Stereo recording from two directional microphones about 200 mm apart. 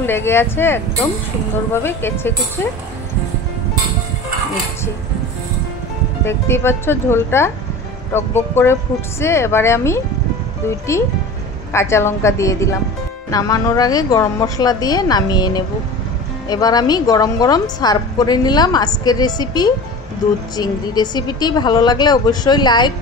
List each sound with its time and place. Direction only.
0.0 s speech: 10° left (ahead or behind)
6.2 s speech: 10° left (ahead or behind)
11.7 s a woman's voice: 15° left (ahead or behind)